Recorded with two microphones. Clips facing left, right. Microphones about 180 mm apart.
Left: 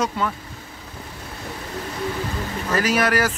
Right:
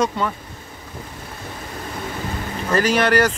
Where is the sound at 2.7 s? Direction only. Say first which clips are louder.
Right 3 dB; 5° left (ahead or behind).